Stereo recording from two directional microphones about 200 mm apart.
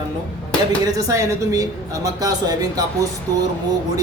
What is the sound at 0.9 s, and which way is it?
A woman's voice, 15° right (ahead or behind).